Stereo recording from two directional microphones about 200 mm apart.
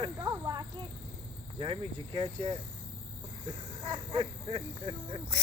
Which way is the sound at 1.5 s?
25° right (ahead or behind).